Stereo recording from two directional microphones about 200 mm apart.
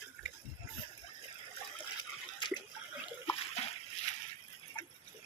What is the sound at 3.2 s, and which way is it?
Splash, 30° left (ahead or behind).